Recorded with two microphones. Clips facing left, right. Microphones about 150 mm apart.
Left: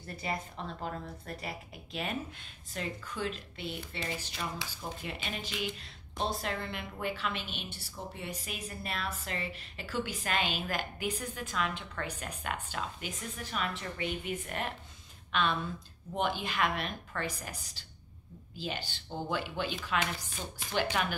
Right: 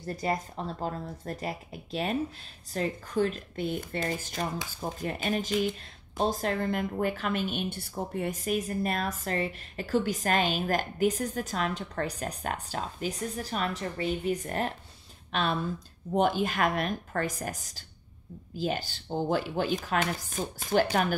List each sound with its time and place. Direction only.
0.0 s a woman's voice: 40° right (ahead or behind)